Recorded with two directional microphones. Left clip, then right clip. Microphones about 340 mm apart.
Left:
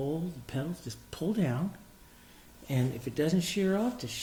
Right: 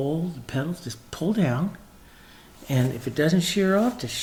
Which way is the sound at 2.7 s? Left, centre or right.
Right.